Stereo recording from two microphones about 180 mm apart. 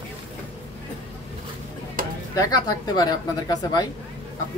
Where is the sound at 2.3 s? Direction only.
20° left (ahead or behind).